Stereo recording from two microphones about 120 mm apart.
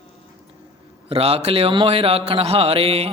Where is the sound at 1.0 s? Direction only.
55° right (ahead or behind).